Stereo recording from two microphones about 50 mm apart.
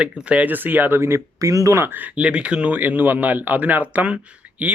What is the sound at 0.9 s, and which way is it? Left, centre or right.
Speech, right.